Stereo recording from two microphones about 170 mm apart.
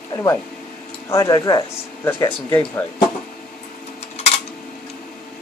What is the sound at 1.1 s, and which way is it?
Speech, 20° left (ahead or behind).